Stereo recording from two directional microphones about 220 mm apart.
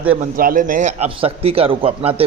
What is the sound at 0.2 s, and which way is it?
A man's voice, 40° right (ahead or behind).